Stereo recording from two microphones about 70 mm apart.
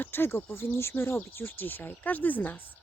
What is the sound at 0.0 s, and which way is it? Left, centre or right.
Speech, left.